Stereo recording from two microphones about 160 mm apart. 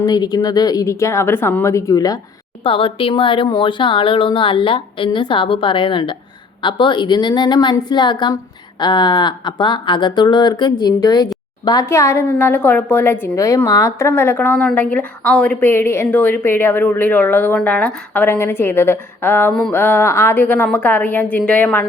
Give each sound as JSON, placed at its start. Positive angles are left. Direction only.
{"t": 0.0, "sound": "speech", "side_deg": 25}
{"t": 2.6, "sound": "a woman's voice", "side_deg": 35}